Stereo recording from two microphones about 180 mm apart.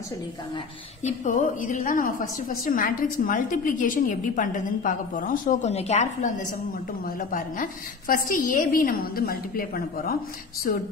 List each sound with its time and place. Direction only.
1.0 s a woman's voice: 45° left (ahead or behind)